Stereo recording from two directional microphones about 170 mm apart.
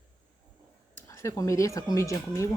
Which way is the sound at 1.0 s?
20° left (ahead or behind).